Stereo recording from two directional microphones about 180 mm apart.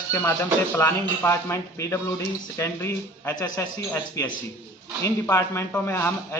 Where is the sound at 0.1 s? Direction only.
15° left (ahead or behind).